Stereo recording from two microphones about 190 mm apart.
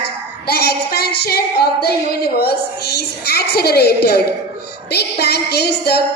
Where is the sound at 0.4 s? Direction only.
55° left (ahead or behind).